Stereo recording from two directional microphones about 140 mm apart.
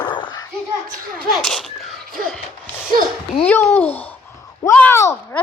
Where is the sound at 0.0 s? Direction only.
35° left (ahead or behind).